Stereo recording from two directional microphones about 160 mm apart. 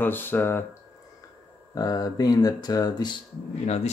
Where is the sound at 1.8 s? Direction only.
25° left (ahead or behind).